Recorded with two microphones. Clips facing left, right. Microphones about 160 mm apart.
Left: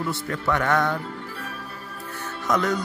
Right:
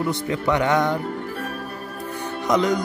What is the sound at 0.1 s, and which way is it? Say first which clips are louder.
Music: right 4 dB; 15° right (ahead or behind).